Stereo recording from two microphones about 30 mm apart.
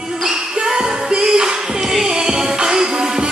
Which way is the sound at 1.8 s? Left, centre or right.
Centre.